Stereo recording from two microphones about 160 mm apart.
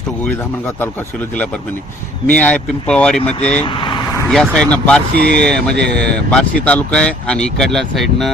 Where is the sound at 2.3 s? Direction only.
10° left (ahead or behind).